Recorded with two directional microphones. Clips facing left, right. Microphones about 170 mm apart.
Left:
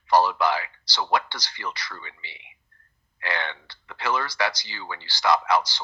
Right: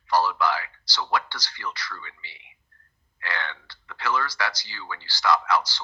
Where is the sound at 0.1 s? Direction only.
20° left (ahead or behind).